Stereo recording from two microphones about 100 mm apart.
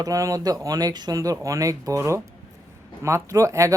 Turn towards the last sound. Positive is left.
turn(degrees=-30)  # may be behind; listen again after turning